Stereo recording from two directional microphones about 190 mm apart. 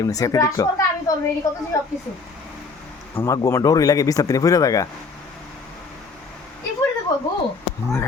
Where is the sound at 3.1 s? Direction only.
15° left (ahead or behind).